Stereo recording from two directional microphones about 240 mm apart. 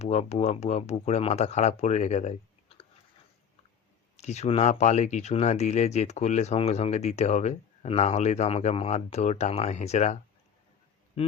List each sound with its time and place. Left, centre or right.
0.0 s speech: left
4.2 s speech: left
11.2 s speech: left